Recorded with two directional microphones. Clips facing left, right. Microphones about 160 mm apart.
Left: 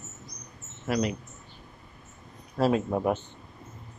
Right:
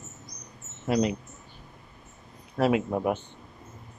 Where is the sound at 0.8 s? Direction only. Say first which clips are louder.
Right 3 dB; 25° right (ahead or behind).